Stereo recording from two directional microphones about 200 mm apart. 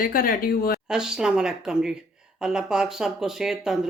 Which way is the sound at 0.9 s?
5° right (ahead or behind).